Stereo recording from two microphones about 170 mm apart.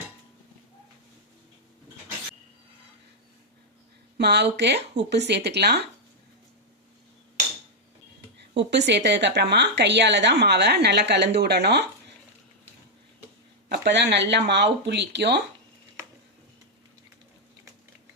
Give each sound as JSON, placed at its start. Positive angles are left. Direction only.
{"t": 4.2, "sound": "a woman's voice", "side_deg": -80}
{"t": 8.5, "sound": "a woman's voice", "side_deg": -90}
{"t": 13.7, "sound": "speech", "side_deg": -90}